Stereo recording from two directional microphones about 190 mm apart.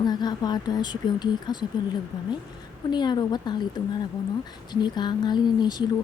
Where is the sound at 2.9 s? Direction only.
25° left (ahead or behind).